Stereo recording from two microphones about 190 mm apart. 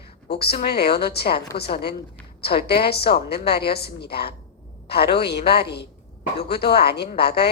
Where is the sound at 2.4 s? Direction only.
55° left (ahead or behind).